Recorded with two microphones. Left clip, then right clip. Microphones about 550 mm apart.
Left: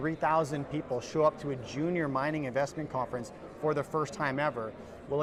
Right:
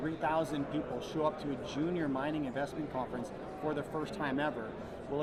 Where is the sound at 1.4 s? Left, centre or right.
Left.